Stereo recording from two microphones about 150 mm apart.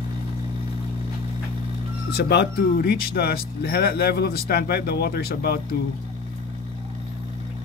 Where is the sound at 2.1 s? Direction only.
90° left.